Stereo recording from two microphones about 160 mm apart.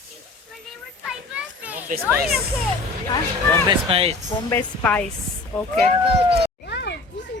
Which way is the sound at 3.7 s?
35° right (ahead or behind).